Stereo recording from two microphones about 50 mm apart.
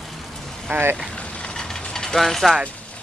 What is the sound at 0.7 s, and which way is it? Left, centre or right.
Speech, right.